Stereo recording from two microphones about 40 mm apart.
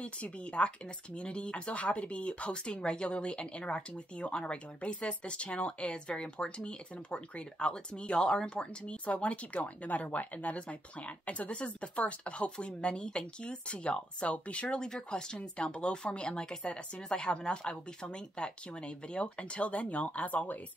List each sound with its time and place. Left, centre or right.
0.0 s speech: left